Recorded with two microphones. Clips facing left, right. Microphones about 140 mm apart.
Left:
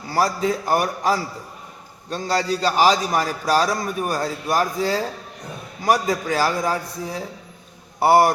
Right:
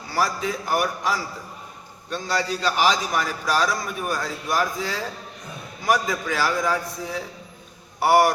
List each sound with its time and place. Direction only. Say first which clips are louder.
0.1 s a man's voice: left 4 dB; 40° left (ahead or behind)